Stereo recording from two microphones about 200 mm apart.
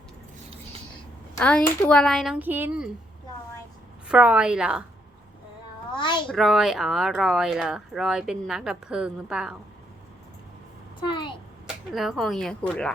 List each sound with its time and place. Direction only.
1.4 s speech: 5° left (ahead or behind)
4.1 s speech: 5° right (ahead or behind)
5.9 s a sound: 25° left (ahead or behind)
6.2 s speech: centre (ahead or behind)
11.0 s a child's voice: 25° left (ahead or behind)
11.6 s speech: centre (ahead or behind)